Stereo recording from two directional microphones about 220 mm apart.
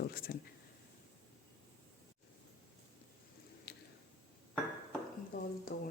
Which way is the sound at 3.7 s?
45° left (ahead or behind).